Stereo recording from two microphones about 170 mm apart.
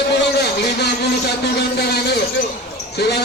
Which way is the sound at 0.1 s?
70° left (ahead or behind).